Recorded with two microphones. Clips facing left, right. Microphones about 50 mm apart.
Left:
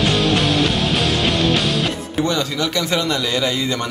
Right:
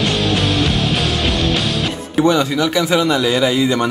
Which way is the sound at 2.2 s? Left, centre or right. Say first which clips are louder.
Right 7 dB; centre.